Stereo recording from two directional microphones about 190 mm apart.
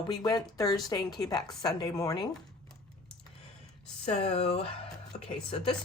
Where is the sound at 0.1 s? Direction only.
20° left (ahead or behind).